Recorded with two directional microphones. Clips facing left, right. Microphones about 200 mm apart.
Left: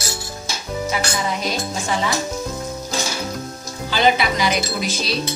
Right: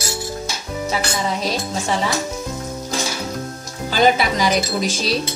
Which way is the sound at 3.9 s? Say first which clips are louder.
Right 2 dB; 40° right (ahead or behind).